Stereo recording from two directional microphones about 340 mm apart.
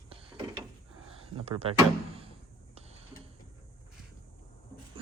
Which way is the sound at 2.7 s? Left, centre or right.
Centre.